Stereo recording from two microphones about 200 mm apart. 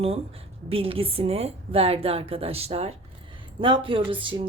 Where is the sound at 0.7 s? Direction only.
30° right (ahead or behind).